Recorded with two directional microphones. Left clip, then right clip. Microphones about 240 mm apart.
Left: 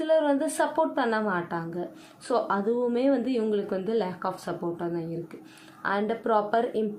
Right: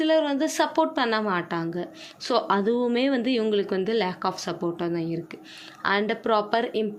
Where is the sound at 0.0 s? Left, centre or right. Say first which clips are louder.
Right 1 dB; right.